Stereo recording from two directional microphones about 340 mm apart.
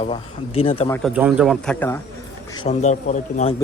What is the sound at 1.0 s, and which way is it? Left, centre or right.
Speech, centre.